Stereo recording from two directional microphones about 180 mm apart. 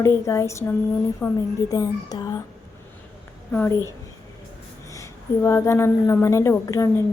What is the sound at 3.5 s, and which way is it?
Speech, 10° left (ahead or behind).